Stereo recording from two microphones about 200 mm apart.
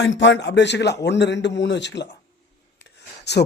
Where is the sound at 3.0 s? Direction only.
55° left (ahead or behind).